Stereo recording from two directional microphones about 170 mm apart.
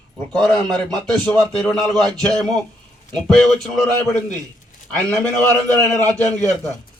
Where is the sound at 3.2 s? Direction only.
Centre (ahead or behind).